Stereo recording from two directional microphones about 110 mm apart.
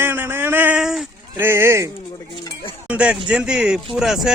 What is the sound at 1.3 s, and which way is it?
Speech, 20° right (ahead or behind).